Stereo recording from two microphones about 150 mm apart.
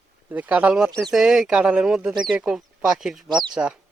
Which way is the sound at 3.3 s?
30° right (ahead or behind).